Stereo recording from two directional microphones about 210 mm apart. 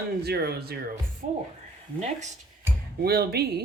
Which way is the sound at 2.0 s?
35° right (ahead or behind).